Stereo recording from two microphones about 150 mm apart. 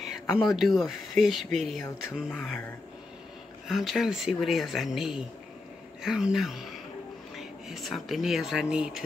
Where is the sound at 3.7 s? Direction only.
Centre (ahead or behind).